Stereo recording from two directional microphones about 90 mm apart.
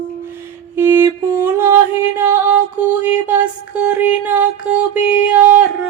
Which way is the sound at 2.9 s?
20° right (ahead or behind).